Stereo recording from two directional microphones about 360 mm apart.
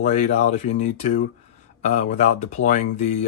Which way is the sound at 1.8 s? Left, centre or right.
Centre.